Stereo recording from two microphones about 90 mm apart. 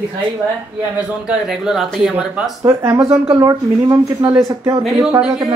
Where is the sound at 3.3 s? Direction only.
40° right (ahead or behind).